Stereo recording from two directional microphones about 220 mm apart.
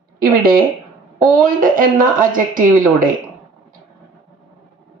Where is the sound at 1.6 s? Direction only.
40° right (ahead or behind).